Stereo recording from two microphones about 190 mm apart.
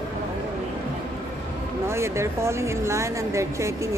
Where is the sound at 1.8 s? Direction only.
15° right (ahead or behind).